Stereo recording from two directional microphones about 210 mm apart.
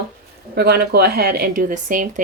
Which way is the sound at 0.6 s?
50° right (ahead or behind).